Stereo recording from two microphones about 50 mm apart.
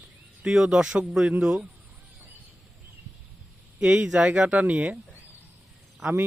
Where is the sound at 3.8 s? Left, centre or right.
Centre.